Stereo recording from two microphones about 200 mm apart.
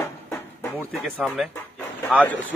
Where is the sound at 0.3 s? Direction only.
10° left (ahead or behind).